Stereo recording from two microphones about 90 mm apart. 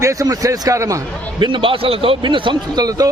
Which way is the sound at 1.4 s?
70° right (ahead or behind).